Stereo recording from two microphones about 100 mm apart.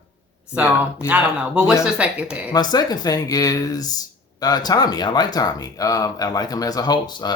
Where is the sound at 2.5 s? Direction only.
40° left (ahead or behind).